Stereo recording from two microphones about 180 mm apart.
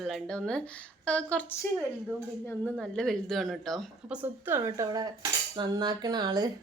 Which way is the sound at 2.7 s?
5° left (ahead or behind).